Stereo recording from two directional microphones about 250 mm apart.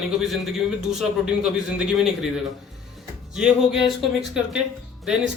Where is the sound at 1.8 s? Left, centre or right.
Centre.